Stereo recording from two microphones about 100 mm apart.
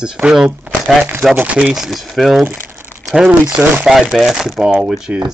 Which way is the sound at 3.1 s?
10° right (ahead or behind).